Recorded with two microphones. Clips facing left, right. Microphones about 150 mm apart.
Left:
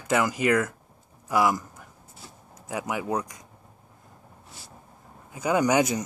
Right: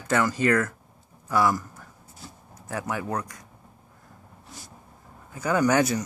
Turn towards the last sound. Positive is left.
turn(degrees=15)  # may be behind; listen again after turning